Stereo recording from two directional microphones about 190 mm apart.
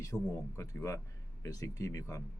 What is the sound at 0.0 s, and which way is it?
Speech, 15° left (ahead or behind).